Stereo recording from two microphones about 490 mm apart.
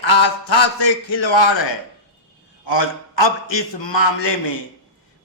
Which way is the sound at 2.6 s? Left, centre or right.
Left.